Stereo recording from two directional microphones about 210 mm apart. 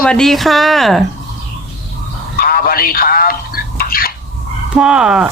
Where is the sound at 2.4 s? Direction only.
45° left (ahead or behind).